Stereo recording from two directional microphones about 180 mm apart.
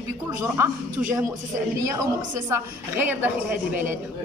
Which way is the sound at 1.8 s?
20° right (ahead or behind).